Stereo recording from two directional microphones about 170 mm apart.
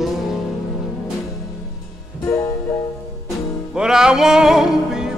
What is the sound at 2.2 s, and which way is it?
Music, 20° left (ahead or behind).